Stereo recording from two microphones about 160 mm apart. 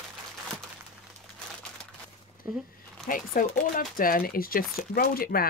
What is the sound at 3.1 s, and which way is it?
Speech, 60° left (ahead or behind).